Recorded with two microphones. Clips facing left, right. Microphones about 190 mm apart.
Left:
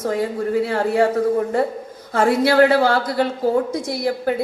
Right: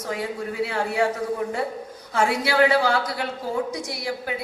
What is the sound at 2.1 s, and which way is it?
A woman's voice, 50° left (ahead or behind).